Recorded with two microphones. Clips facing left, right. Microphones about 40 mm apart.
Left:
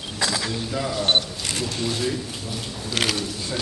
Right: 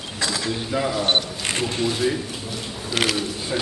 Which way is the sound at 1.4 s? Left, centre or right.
Right.